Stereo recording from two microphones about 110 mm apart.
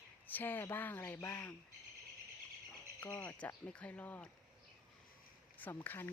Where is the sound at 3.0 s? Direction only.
15° left (ahead or behind).